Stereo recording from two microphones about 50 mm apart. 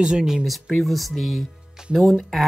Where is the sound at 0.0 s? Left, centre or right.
Centre.